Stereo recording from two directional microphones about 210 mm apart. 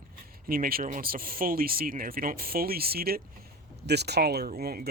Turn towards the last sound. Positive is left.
turn(degrees=-45)  # may be behind; listen again after turning